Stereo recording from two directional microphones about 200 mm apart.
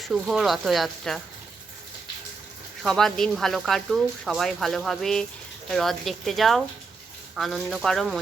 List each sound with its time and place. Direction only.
0.0 s speech: centre (ahead or behind)
2.8 s speech: centre (ahead or behind)